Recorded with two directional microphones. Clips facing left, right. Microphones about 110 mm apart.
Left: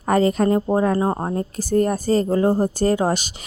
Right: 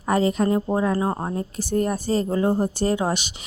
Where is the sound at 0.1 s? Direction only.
45° left (ahead or behind).